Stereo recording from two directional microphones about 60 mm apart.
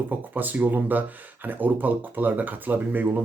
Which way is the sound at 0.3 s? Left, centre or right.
Right.